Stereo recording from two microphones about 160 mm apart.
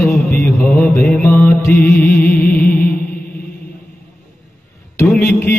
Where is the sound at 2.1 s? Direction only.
70° left (ahead or behind).